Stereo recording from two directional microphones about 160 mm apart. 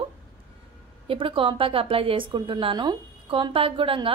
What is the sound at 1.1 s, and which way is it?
A woman's voice, 35° right (ahead or behind).